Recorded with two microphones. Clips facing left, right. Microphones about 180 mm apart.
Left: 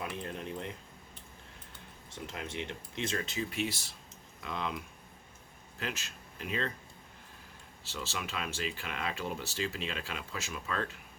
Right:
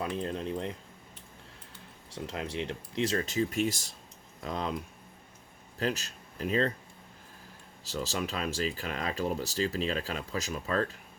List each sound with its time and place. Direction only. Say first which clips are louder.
0.0 s speech: right 6 dB; 30° right (ahead or behind)
2.0 s speech: right 5 dB; 30° right (ahead or behind)
5.8 s speech: right 8 dB; 40° right (ahead or behind)
7.9 s speech: right 6 dB; 40° right (ahead or behind)